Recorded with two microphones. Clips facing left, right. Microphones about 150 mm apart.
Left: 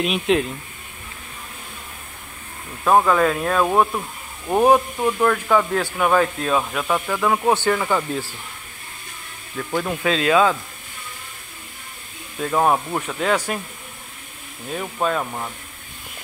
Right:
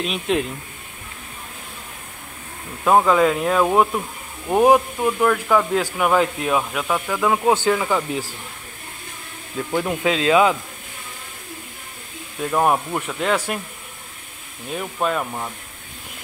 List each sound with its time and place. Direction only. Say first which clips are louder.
0.0 s speech: left 3 dB; 5° left (ahead or behind)
2.8 s speech: right 1 dB; 10° right (ahead or behind)
9.7 s speech: right 1 dB; 15° right (ahead or behind)
12.4 s speech: even; centre (ahead or behind)
14.7 s speech: even; centre (ahead or behind)